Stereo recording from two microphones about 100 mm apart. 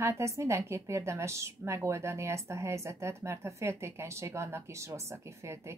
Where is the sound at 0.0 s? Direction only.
30° right (ahead or behind).